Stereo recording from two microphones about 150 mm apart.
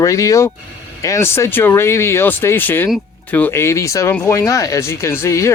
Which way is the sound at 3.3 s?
15° left (ahead or behind).